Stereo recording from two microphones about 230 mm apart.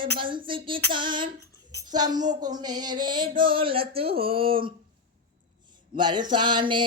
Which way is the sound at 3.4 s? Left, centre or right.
Right.